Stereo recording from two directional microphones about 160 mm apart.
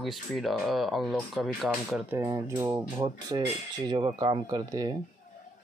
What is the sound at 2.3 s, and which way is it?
Speech, 20° right (ahead or behind).